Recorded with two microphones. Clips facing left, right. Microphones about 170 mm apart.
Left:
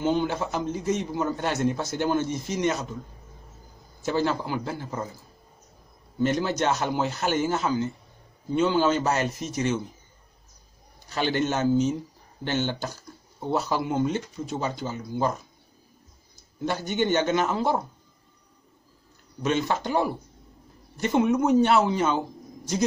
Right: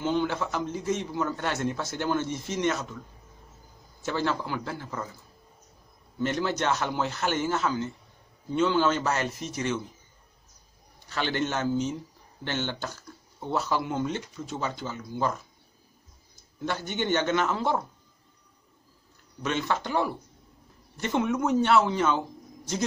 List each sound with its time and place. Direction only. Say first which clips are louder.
0.0 s speech: left 2 dB; 15° left (ahead or behind)
4.0 s speech: left 3 dB; 15° left (ahead or behind)
6.1 s speech: left 3 dB; 15° left (ahead or behind)
11.1 s speech: left 4 dB; 15° left (ahead or behind)
16.6 s speech: left 4 dB; 15° left (ahead or behind)
19.4 s speech: left 3 dB; 15° left (ahead or behind)